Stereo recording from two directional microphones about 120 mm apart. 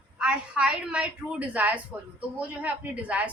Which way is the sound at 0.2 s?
10° right (ahead or behind).